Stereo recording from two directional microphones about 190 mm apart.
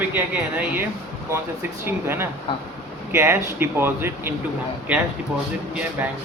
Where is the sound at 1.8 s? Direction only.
10° right (ahead or behind).